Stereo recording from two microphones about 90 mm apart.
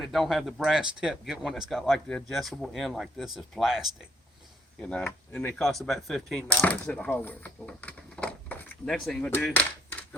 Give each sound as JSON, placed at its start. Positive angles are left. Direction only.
{"t": 0.0, "sound": "speech", "side_deg": 0}
{"t": 1.8, "sound": "speech", "side_deg": 5}
{"t": 4.8, "sound": "speech", "side_deg": 10}
{"t": 6.8, "sound": "speech", "side_deg": 15}
{"t": 7.8, "sound": "a sound", "side_deg": 15}
{"t": 8.9, "sound": "speech", "side_deg": 5}
{"t": 9.4, "sound": "a sound", "side_deg": 15}